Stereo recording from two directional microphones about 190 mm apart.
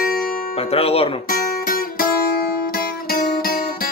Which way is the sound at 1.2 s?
50° left (ahead or behind).